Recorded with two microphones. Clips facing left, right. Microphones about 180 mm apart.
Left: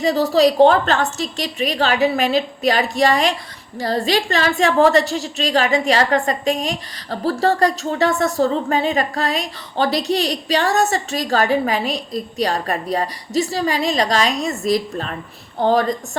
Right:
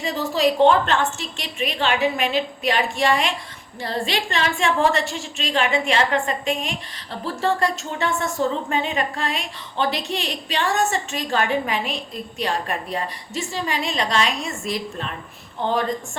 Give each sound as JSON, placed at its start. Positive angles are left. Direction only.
{"t": 0.0, "sound": "a woman's voice", "side_deg": 35}